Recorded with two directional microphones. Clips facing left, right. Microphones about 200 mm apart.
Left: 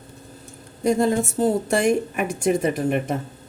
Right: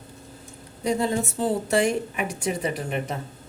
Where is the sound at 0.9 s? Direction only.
45° left (ahead or behind).